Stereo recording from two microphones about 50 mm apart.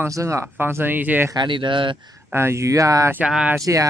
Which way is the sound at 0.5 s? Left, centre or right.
Right.